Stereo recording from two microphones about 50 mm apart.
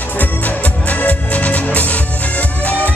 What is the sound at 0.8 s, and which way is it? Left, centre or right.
Music, left.